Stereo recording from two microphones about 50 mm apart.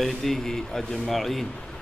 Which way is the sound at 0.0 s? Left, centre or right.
Centre.